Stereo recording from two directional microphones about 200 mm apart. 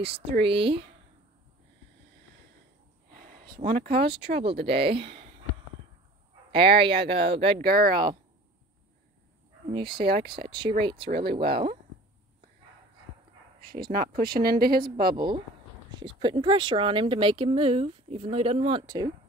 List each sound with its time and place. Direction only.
0.0 s speech: 30° right (ahead or behind)
3.2 s a sound: 45° right (ahead or behind)
4.1 s speech: 30° right (ahead or behind)
6.5 s speech: 25° right (ahead or behind)
7.6 s speech: 50° right (ahead or behind)
9.7 s speech: 25° right (ahead or behind)
11.1 s speech: 50° right (ahead or behind)
11.3 s speech: 25° right (ahead or behind)
14.1 s speech: 50° right (ahead or behind)
15.1 s speech: 20° right (ahead or behind)